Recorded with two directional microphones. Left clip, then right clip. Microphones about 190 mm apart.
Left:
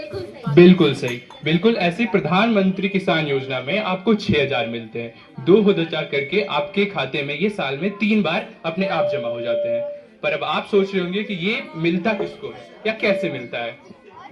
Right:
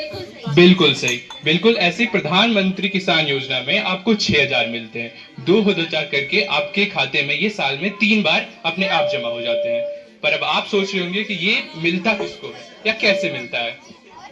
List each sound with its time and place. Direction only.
0.5 s speech: 60° left (ahead or behind)